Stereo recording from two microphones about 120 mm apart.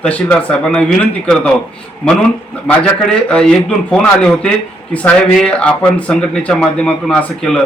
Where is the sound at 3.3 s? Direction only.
5° left (ahead or behind).